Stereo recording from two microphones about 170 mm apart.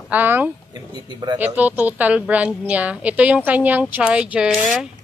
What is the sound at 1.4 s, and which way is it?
A woman's voice, 10° right (ahead or behind).